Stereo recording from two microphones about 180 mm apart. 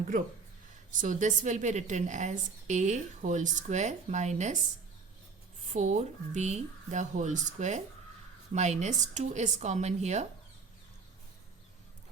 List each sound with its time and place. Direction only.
0.9 s a woman's voice: 45° right (ahead or behind)
5.6 s a woman's voice: 40° right (ahead or behind)